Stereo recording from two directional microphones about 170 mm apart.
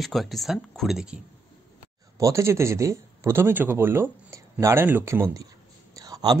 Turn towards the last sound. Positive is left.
turn(degrees=-25)  # may be behind; listen again after turning